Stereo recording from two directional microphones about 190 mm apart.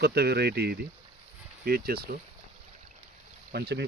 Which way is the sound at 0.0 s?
55° right (ahead or behind).